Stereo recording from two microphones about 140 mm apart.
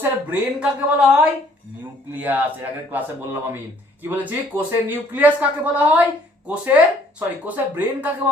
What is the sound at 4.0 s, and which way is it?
A man's voice, 15° right (ahead or behind).